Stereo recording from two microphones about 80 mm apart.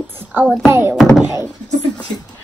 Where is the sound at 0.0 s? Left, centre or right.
Right.